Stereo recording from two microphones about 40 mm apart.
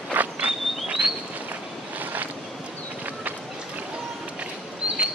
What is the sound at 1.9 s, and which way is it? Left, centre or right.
Boat, right.